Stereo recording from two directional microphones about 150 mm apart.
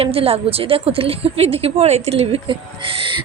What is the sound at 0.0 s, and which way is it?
A woman's voice, 40° right (ahead or behind).